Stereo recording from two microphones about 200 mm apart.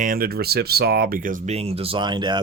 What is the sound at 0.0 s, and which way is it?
Speech, 45° right (ahead or behind).